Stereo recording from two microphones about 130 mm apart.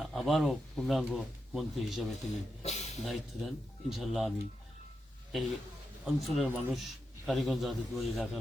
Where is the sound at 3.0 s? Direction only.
Centre (ahead or behind).